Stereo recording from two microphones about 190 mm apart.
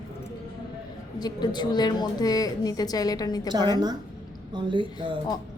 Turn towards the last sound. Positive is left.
turn(degrees=-25)  # may be behind; listen again after turning